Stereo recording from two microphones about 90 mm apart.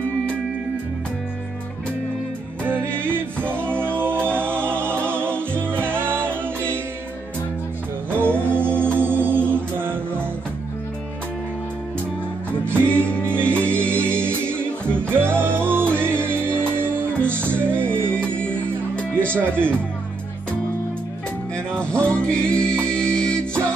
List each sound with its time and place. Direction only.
2.6 s music: 25° right (ahead or behind)
6.2 s music: 15° left (ahead or behind)
8.1 s music: 25° right (ahead or behind)
12.8 s music: 15° left (ahead or behind)
13.7 s music: 25° right (ahead or behind)
18.4 s music: 10° left (ahead or behind)
19.1 s music: 25° right (ahead or behind)
21.7 s music: 10° left (ahead or behind)